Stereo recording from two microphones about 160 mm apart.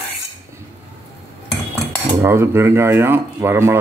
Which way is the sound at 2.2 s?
15° right (ahead or behind).